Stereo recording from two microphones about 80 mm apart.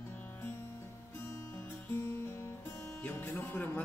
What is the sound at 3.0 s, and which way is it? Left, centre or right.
Music, left.